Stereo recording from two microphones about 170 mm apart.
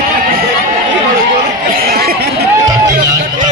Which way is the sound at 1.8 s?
65° right (ahead or behind).